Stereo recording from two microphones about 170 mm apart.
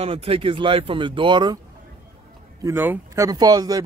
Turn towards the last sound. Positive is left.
turn(degrees=-25)  # may be behind; listen again after turning